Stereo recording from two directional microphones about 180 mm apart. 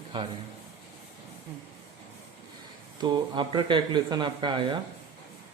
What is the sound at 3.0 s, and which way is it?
Speech, 25° right (ahead or behind).